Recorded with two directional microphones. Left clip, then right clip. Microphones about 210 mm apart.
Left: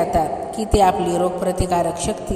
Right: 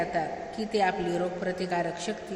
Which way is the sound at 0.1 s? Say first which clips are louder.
Left 11 dB; 30° left (ahead or behind).